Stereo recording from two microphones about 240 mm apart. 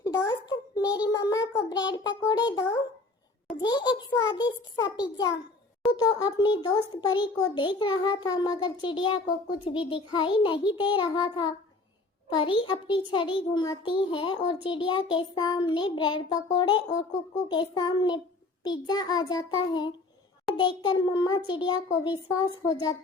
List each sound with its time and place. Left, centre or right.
0.0 s a sound: centre
0.9 s child singing: centre
5.9 s a child's voice: centre
14.8 s child singing: centre